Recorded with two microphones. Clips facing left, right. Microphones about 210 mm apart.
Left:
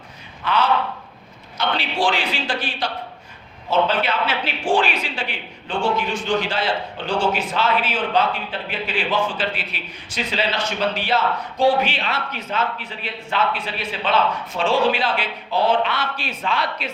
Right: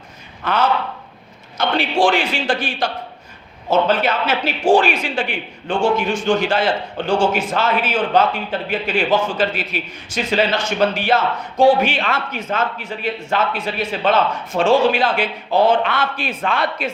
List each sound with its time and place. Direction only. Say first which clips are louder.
0.4 s a man's voice: right 1 dB; 45° right (ahead or behind)